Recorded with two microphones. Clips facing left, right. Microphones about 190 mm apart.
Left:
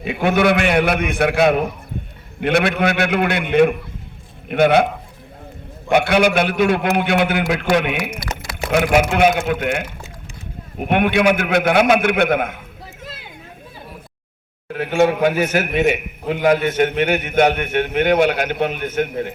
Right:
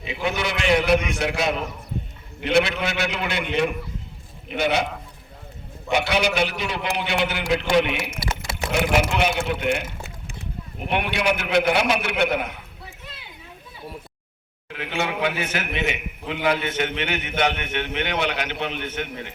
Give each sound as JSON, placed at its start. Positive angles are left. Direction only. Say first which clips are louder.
{"t": 0.0, "sound": "a man's voice", "louder": "left 10 dB", "side_deg": 55}
{"t": 5.9, "sound": "a man's voice", "louder": "left 7 dB", "side_deg": 55}
{"t": 13.1, "sound": "a sound", "louder": "left 6 dB", "side_deg": 50}
{"t": 14.7, "sound": "a man's voice", "louder": "left 11 dB", "side_deg": 45}